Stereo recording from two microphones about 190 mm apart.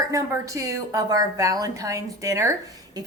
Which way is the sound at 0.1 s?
15° right (ahead or behind).